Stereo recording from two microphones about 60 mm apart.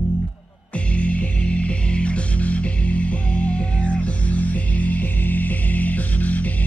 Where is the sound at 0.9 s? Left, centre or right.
Left.